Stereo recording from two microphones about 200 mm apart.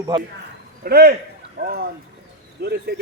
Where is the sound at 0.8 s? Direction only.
50° right (ahead or behind).